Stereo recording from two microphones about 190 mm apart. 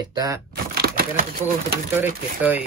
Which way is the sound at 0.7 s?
55° right (ahead or behind).